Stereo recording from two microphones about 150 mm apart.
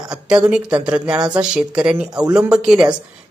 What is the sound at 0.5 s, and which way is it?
Speech, 5° right (ahead or behind).